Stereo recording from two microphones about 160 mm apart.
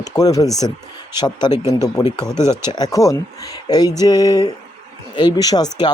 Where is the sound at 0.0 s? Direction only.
20° left (ahead or behind).